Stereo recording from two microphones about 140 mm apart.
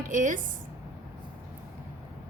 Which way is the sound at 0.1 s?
70° right (ahead or behind).